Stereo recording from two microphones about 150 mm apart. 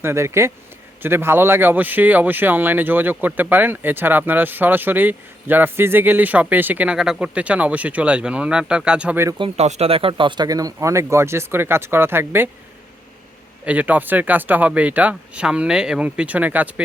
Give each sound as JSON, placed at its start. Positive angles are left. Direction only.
{"t": 0.0, "sound": "speech", "side_deg": -15}
{"t": 9.4, "sound": "speech", "side_deg": -45}
{"t": 13.7, "sound": "speech", "side_deg": -10}